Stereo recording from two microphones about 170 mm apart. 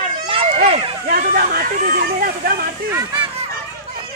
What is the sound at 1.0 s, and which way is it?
Speech, 60° right (ahead or behind).